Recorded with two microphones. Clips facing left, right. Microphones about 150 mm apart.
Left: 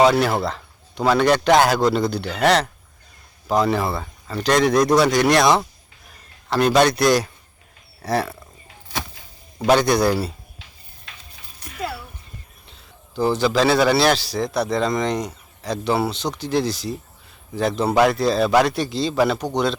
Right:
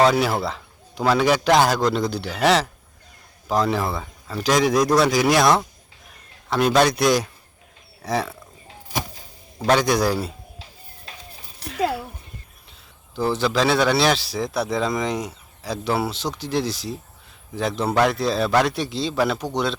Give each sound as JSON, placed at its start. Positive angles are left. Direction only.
{"t": 0.0, "sound": "a man's voice", "side_deg": 0}
{"t": 9.6, "sound": "speech", "side_deg": 0}
{"t": 11.1, "sound": "a sound", "side_deg": -35}
{"t": 13.1, "sound": "speech", "side_deg": 0}